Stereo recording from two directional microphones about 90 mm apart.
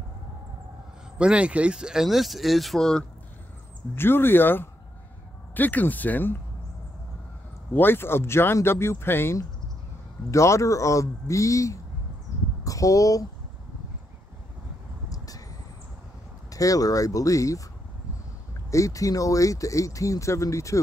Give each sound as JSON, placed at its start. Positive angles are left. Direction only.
{"t": 1.1, "sound": "speech", "side_deg": -10}
{"t": 3.9, "sound": "speech", "side_deg": 25}
{"t": 7.7, "sound": "speech", "side_deg": 25}
{"t": 15.0, "sound": "vehicle", "side_deg": 40}
{"t": 16.4, "sound": "speech", "side_deg": 40}
{"t": 18.7, "sound": "speech", "side_deg": 35}